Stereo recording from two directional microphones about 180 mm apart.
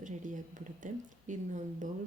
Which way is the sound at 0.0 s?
45° right (ahead or behind).